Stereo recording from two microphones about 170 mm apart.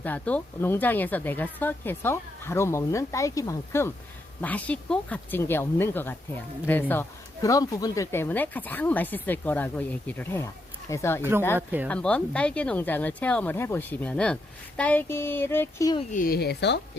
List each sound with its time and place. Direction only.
0.0 s speech: 10° left (ahead or behind)
11.2 s speech: 15° right (ahead or behind)
11.9 s speech: 5° left (ahead or behind)
16.1 s speech: 60° left (ahead or behind); by 16.8 s 85° left